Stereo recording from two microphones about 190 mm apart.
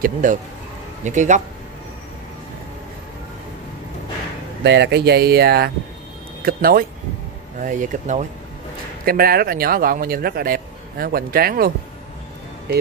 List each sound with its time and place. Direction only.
0.0 s speech: 40° right (ahead or behind)
4.6 s speech: 60° right (ahead or behind); by 8.3 s 40° right (ahead or behind)
9.0 s speech: 50° right (ahead or behind)